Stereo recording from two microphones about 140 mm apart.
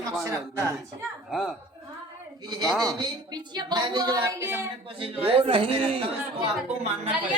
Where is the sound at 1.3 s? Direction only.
5° left (ahead or behind).